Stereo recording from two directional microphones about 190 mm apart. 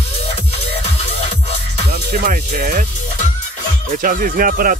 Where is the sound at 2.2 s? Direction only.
45° right (ahead or behind).